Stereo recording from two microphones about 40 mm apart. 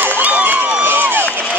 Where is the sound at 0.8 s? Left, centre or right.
Right.